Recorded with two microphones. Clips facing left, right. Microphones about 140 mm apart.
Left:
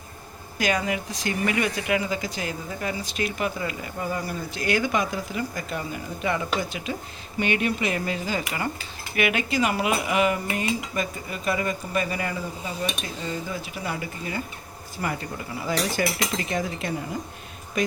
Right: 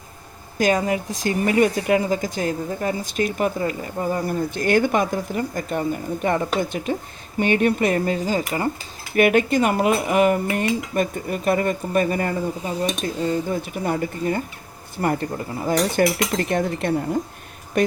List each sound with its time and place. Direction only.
0.8 s speech: 35° right (ahead or behind)
4.5 s speech: 50° right (ahead or behind)
9.1 s speech: 45° right (ahead or behind)